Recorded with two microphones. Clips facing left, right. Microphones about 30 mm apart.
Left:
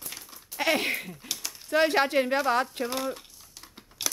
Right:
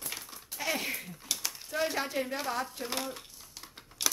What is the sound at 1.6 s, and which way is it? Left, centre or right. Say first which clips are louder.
Speech: left 10 dB; left.